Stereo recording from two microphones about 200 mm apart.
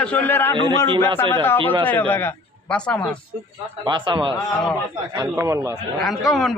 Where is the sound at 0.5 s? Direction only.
25° right (ahead or behind).